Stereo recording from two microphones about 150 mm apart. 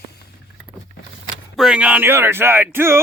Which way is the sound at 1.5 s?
Centre (ahead or behind).